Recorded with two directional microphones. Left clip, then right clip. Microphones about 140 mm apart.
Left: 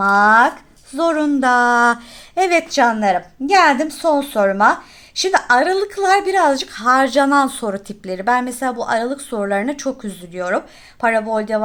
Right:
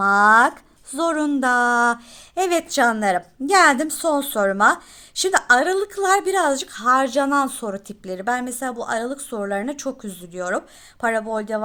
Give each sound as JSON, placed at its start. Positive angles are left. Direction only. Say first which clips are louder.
{"t": 0.0, "sound": "speech", "louder": "left 2 dB", "side_deg": -40}
{"t": 2.7, "sound": "a woman's voice", "louder": "left 4 dB", "side_deg": -45}